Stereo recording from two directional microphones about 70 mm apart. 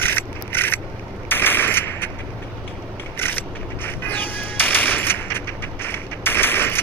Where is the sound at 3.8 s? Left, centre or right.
Left.